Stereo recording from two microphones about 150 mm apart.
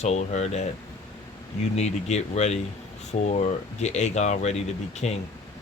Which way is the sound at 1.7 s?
45° left (ahead or behind).